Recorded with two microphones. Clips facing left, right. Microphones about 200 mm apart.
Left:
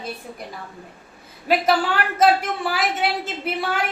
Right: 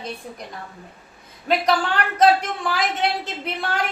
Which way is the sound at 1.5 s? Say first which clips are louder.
Left 1 dB; 5° left (ahead or behind).